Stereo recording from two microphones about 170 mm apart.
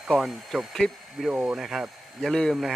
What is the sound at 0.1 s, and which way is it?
Speech, centre (ahead or behind).